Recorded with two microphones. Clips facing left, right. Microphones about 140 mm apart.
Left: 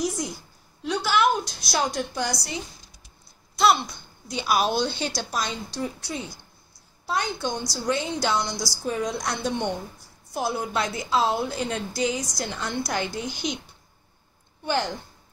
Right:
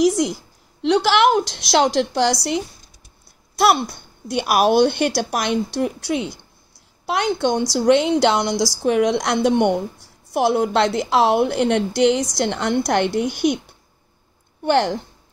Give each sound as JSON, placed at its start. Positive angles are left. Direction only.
{"t": 0.0, "sound": "a woman's voice", "side_deg": -90}
{"t": 0.8, "sound": "a woman's voice", "side_deg": -80}
{"t": 3.5, "sound": "a woman's voice", "side_deg": -60}
{"t": 14.6, "sound": "a woman's voice", "side_deg": -65}